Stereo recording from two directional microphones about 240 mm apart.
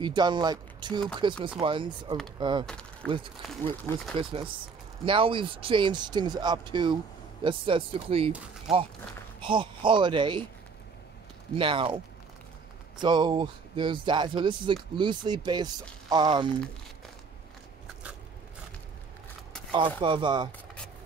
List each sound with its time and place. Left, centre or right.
0.0 s speech: centre
2.6 s speech: centre
4.1 s speech: right
8.7 s speech: centre
9.4 s speech: centre
11.5 s speech: right
13.0 s speech: centre
20.0 s speech: centre